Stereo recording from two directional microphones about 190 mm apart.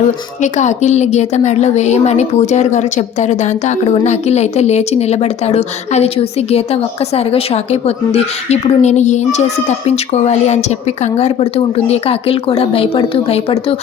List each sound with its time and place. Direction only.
0.4 s a woman's voice: 40° left (ahead or behind)